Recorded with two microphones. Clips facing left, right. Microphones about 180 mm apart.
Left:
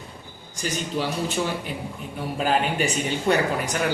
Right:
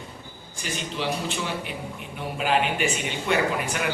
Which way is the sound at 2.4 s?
40° left (ahead or behind).